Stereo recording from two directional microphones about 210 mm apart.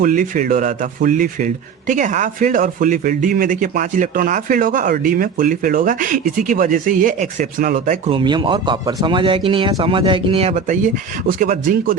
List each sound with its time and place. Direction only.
0.0 s speech: 40° right (ahead or behind)